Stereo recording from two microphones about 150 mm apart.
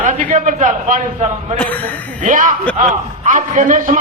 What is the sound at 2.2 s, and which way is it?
Speech, 60° right (ahead or behind).